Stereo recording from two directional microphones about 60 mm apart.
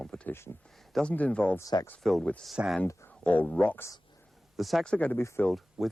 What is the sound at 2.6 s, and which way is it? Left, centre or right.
Speech, right.